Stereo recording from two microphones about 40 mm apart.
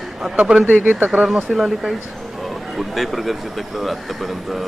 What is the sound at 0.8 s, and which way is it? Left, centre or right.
Speech, right.